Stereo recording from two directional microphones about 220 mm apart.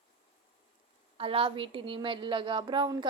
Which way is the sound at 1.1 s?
25° right (ahead or behind).